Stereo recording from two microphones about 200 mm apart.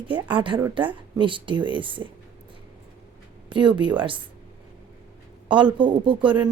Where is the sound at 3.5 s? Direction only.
25° right (ahead or behind).